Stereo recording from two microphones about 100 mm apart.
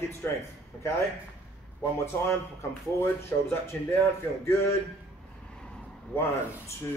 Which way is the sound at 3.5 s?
25° left (ahead or behind).